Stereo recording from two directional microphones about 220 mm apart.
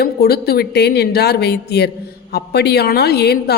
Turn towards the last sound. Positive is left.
turn(degrees=45)  # may be behind; listen again after turning